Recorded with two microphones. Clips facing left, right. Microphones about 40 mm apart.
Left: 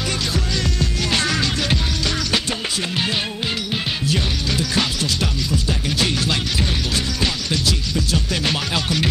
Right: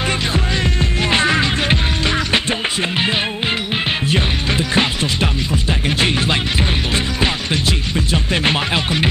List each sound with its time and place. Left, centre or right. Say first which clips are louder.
1.1 s music: right 6 dB; right
4.1 s music: right 4 dB; right